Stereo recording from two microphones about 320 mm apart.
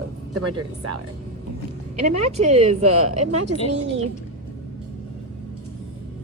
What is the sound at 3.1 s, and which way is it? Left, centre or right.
Speech, right.